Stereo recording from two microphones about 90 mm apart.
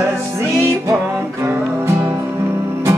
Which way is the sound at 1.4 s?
35° right (ahead or behind).